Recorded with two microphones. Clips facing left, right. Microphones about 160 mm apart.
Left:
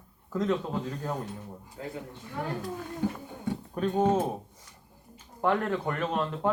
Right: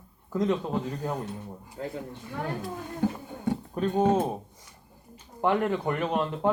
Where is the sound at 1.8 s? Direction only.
40° right (ahead or behind).